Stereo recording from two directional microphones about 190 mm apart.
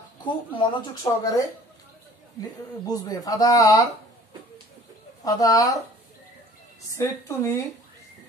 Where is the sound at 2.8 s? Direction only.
20° left (ahead or behind).